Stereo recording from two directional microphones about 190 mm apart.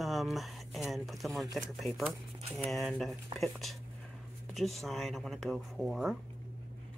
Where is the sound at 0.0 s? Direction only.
Centre (ahead or behind).